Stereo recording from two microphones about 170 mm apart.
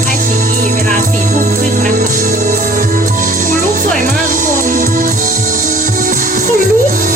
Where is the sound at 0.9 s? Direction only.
50° right (ahead or behind).